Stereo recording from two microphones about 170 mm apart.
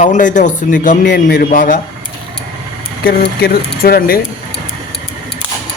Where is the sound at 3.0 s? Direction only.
65° left (ahead or behind).